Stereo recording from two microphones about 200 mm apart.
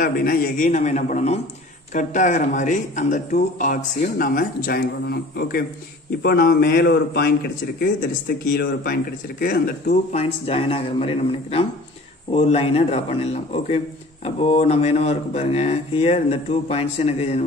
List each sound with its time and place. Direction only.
0.0 s speech: 45° left (ahead or behind)
10.1 s a man's voice: 30° left (ahead or behind)